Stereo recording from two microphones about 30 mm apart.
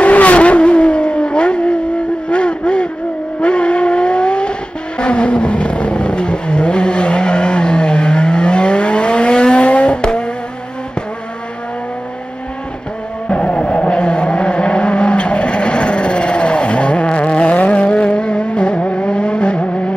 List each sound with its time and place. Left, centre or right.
0.0 s vehicle: left
10.0 s a sound: left
13.3 s music: left
13.8 s vehicle: left